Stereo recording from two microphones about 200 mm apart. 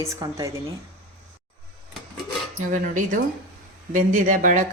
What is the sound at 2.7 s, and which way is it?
Speech, 40° right (ahead or behind).